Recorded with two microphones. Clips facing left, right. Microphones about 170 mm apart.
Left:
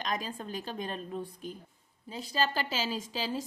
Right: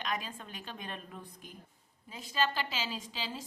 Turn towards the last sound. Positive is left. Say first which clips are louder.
# left 5 dB
turn(degrees=45)  # may be behind; listen again after turning